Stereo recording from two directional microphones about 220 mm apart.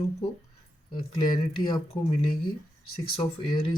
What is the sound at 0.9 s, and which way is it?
Speech, 20° left (ahead or behind).